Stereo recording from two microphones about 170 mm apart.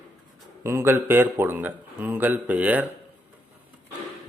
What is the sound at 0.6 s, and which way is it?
A man's voice, 15° right (ahead or behind).